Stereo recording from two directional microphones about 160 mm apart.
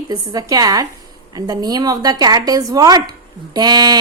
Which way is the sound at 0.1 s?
25° right (ahead or behind).